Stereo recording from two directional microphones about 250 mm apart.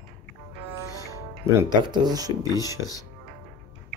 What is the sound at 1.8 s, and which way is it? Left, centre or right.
Speech, centre.